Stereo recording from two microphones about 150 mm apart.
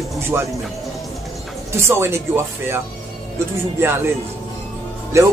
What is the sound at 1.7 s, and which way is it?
Speech, 15° right (ahead or behind).